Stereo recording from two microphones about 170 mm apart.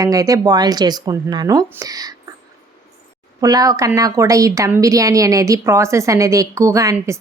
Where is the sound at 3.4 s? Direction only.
20° right (ahead or behind).